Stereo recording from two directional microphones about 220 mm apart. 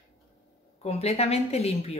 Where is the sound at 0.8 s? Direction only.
30° left (ahead or behind).